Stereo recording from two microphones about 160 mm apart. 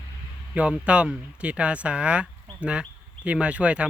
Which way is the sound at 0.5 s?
5° right (ahead or behind).